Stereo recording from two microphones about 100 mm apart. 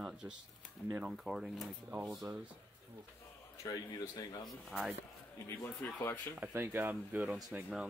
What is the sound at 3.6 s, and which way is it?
Speech, 40° left (ahead or behind).